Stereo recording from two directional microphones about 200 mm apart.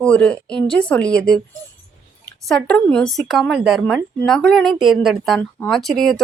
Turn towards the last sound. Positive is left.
turn(degrees=0)  # may be behind; listen again after turning